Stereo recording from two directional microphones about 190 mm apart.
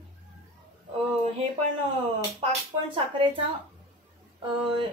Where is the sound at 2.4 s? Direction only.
25° right (ahead or behind).